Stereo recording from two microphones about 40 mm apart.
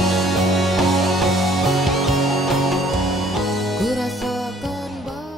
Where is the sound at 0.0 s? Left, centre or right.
Centre.